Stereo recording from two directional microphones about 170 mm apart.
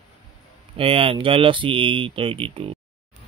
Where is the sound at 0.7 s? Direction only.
30° right (ahead or behind).